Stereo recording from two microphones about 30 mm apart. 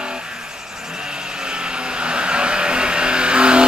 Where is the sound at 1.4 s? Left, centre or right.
Right.